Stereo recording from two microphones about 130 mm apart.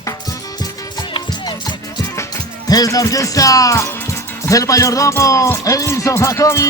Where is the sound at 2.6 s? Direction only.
30° left (ahead or behind).